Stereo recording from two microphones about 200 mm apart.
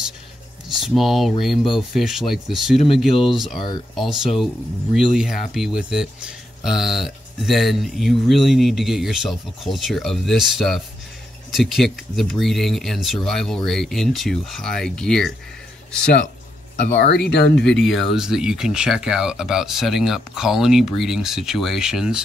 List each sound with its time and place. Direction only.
0.7 s speech: centre (ahead or behind)
17.0 s speech: 60° left (ahead or behind)
17.6 s speech: centre (ahead or behind)